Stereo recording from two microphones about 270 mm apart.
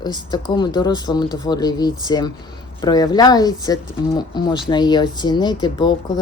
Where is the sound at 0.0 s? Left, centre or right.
Centre.